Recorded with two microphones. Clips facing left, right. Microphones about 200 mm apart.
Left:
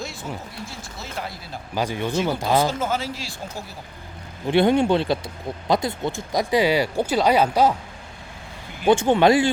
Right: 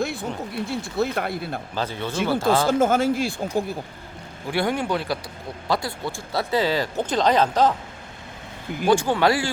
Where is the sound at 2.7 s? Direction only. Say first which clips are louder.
Right 7 dB; 50° right (ahead or behind).